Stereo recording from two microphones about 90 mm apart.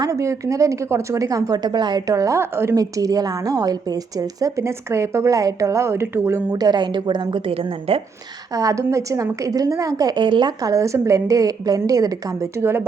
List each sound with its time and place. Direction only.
0.0 s a woman's voice: 35° right (ahead or behind)
2.7 s a woman's voice: 40° right (ahead or behind)
6.6 s a woman's voice: 50° right (ahead or behind); by 8.0 s 90° right
8.5 s a woman's voice: 35° right (ahead or behind)
10.2 s a woman's voice: 60° right (ahead or behind)
10.6 s a woman's voice: 40° right (ahead or behind)